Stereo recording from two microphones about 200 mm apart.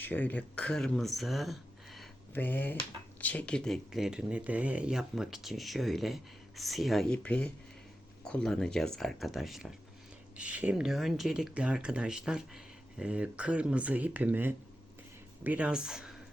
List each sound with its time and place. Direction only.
0.0 s speech: 10° left (ahead or behind)